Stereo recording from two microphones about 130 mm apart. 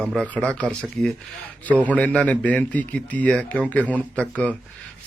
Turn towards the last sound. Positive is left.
turn(degrees=10)  # may be behind; listen again after turning